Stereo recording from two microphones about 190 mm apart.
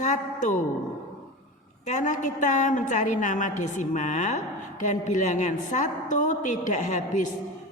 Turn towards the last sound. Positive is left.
turn(degrees=40)  # may be behind; listen again after turning